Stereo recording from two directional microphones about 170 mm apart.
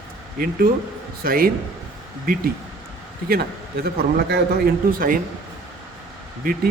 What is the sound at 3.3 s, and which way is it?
A man's voice, 65° right (ahead or behind).